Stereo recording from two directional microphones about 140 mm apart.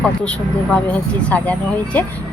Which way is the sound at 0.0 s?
5° left (ahead or behind).